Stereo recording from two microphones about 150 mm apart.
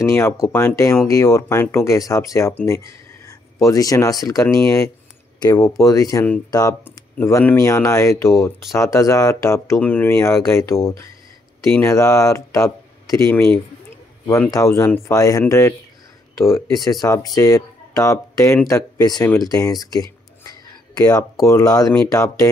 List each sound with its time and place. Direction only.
0.0 s speech: 20° left (ahead or behind)